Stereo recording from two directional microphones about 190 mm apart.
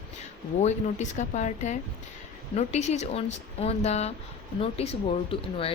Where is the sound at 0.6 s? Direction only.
40° left (ahead or behind).